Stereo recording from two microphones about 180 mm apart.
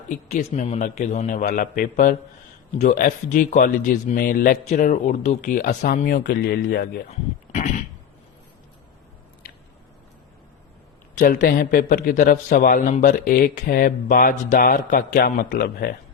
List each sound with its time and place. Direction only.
0.1 s a man's voice: 45° left (ahead or behind); by 7.0 s 60° left (ahead or behind)
11.2 s a man's voice: 50° left (ahead or behind)